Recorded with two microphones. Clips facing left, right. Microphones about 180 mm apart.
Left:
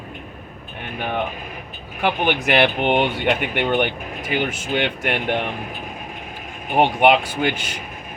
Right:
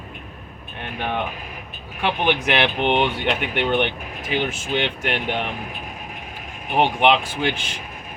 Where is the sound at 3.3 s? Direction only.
5° left (ahead or behind).